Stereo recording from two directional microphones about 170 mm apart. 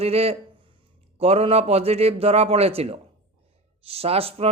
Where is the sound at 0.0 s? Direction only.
35° right (ahead or behind).